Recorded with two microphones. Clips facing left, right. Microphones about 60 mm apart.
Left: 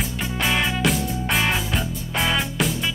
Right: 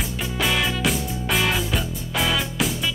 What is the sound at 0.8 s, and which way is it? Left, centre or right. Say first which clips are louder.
Music: left 2 dB; centre.